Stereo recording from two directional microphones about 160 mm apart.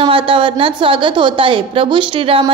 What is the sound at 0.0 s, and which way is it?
A woman's voice, 35° right (ahead or behind).